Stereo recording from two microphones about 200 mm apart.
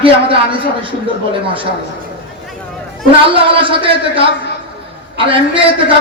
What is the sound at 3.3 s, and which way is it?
A man's voice, 25° right (ahead or behind).